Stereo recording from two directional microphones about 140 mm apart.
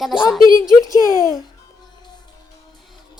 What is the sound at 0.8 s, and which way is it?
Speech, 25° left (ahead or behind).